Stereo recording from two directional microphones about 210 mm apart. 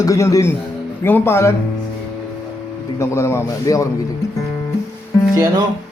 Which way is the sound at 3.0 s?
10° left (ahead or behind).